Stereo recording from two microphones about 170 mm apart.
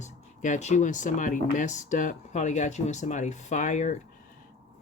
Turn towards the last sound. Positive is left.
turn(degrees=45)  # may be behind; listen again after turning